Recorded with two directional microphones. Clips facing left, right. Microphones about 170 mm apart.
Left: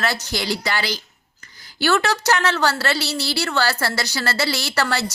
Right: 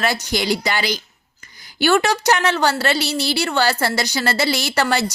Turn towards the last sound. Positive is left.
turn(degrees=-20)  # may be behind; listen again after turning